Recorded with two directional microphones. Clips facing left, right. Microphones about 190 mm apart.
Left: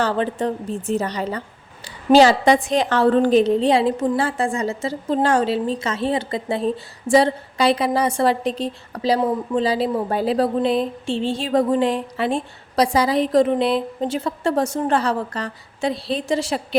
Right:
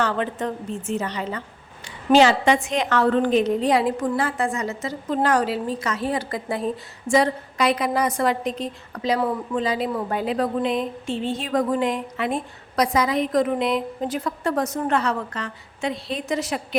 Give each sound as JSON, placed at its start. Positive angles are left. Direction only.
{"t": 0.0, "sound": "a woman's voice", "side_deg": 30}
{"t": 9.2, "sound": "a woman's voice", "side_deg": 20}